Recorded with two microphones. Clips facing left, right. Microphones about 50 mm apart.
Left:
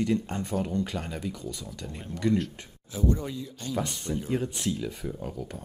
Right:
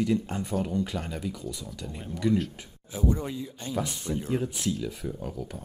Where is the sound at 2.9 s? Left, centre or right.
Centre.